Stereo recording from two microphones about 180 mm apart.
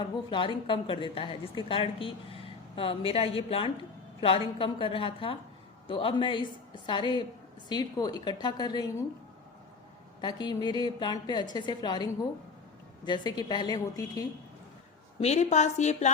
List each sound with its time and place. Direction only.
0.0 s a woman's voice: 30° left (ahead or behind)
10.2 s a woman's voice: 25° left (ahead or behind)
13.1 s a woman's voice: 20° left (ahead or behind)
15.2 s a woman's voice: 40° left (ahead or behind)